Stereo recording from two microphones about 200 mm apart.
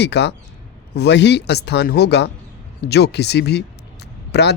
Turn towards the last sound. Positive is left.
turn(degrees=55)  # may be behind; listen again after turning